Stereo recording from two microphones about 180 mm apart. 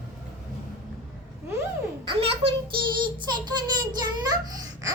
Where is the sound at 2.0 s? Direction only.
30° right (ahead or behind).